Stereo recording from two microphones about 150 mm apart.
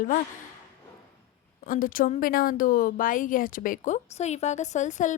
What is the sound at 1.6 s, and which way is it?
A woman's voice, 65° left (ahead or behind).